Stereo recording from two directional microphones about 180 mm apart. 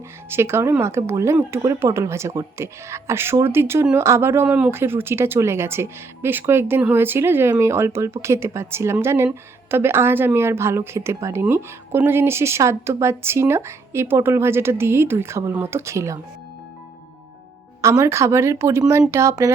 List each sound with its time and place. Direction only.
0.3 s speech: 15° right (ahead or behind)
17.7 s speech: 15° right (ahead or behind)